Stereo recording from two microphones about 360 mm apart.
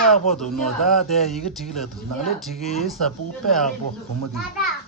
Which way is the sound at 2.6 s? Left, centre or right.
Centre.